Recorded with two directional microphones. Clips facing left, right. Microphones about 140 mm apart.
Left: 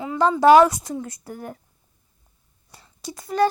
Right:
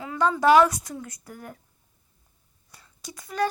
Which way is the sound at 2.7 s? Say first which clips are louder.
Left 7 dB; 30° left (ahead or behind).